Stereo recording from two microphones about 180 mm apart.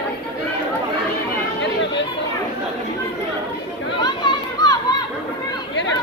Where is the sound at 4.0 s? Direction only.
25° left (ahead or behind).